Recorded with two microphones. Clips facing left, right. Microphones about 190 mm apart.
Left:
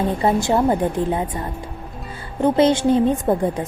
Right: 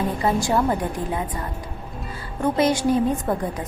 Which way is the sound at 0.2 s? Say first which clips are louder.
Left 3 dB; 25° left (ahead or behind).